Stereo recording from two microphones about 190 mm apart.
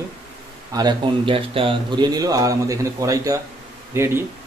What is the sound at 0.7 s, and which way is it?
Speech, 20° right (ahead or behind).